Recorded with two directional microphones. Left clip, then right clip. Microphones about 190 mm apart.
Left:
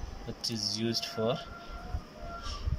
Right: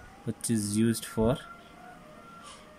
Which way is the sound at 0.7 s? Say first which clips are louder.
Right 3 dB; 35° right (ahead or behind).